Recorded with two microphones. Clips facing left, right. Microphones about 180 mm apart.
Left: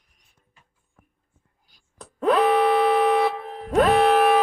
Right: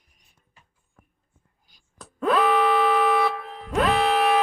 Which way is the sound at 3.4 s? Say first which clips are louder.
Left 4 dB; 40° left (ahead or behind).